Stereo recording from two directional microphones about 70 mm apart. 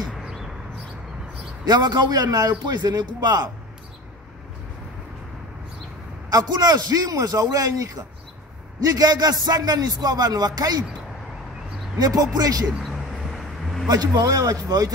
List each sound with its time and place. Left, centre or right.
0.1 s a sound: centre
1.7 s speech: right
6.3 s a man's voice: right
8.8 s speech: right
12.0 s a man's voice: right
12.8 s a sound: centre
13.8 s a man's voice: right